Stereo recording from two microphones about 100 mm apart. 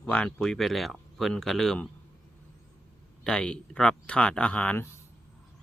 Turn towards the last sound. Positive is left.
turn(degrees=15)  # may be behind; listen again after turning